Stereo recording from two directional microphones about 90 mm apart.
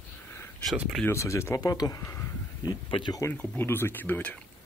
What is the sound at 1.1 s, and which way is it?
Speech, 35° left (ahead or behind).